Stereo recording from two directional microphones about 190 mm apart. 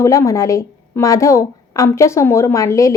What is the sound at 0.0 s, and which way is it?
A woman's voice, 15° left (ahead or behind).